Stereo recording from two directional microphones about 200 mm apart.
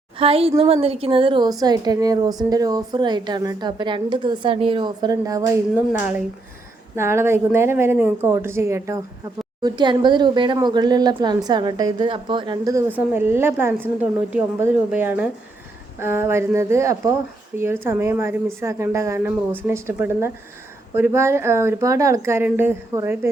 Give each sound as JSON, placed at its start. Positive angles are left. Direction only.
{"t": 0.2, "sound": "speech", "side_deg": -30}